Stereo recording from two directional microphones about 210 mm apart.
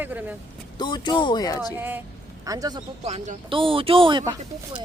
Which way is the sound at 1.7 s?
10° right (ahead or behind).